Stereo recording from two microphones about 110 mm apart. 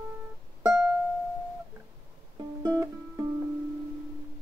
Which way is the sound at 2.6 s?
20° right (ahead or behind).